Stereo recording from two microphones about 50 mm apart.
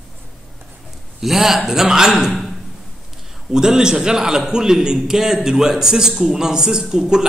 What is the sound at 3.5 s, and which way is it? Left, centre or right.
A man's voice, centre.